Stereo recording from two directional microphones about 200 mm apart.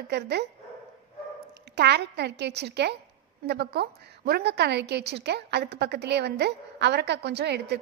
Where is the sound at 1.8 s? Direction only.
55° right (ahead or behind).